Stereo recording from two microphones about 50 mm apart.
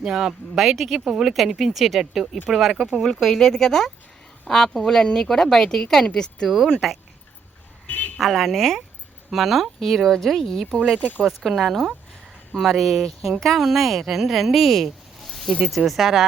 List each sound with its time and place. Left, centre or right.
0.0 s speech: centre
0.5 s speech: centre
3.0 s speech: centre
6.7 s speech: centre
7.9 s a sound: left
8.2 s speech: centre
10.8 s speech: centre
11.3 s speech: centre